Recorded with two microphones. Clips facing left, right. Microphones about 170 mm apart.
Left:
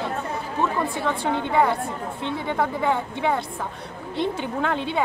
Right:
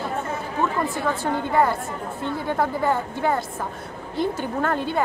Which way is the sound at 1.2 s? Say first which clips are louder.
Even; centre (ahead or behind).